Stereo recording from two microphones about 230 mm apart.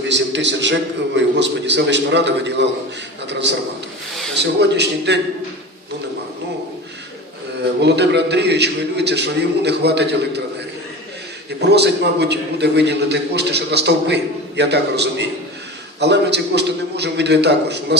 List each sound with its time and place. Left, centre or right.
0.1 s a man's voice: right
7.6 s a man's voice: right
11.7 s a man's voice: right